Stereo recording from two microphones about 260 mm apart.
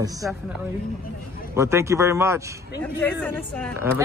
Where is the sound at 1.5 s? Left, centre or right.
Centre.